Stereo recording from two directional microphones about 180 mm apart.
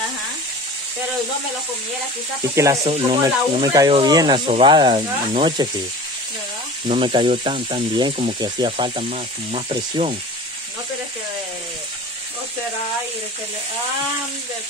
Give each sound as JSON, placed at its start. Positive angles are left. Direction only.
{"t": 2.5, "sound": "frying", "side_deg": -15}
{"t": 2.8, "sound": "speech", "side_deg": -35}
{"t": 3.2, "sound": "speech", "side_deg": -20}
{"t": 6.9, "sound": "speech", "side_deg": -30}